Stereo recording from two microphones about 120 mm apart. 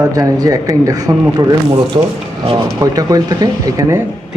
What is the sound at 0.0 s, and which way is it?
Speech, 30° right (ahead or behind).